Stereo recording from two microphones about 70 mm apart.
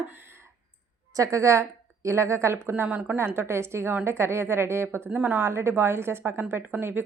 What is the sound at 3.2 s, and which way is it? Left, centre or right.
A woman's voice, right.